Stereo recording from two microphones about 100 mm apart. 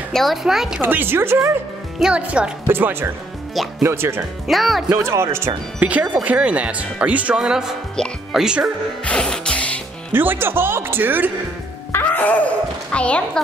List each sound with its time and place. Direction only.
0.1 s speech: centre (ahead or behind)
0.7 s speech: 20° right (ahead or behind)
2.0 s speech: 10° right (ahead or behind); by 4.2 s 25° right (ahead or behind)
4.5 s speech: centre (ahead or behind)
4.9 s speech: 25° right (ahead or behind)
5.8 s speech: 15° right (ahead or behind)
9.0 s music: 10° left (ahead or behind)
10.1 s speech: 20° right (ahead or behind)
11.9 s a sound: 20° left (ahead or behind)